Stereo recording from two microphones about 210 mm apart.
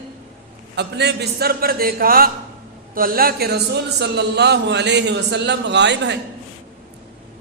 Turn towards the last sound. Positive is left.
turn(degrees=-55)  # may be behind; listen again after turning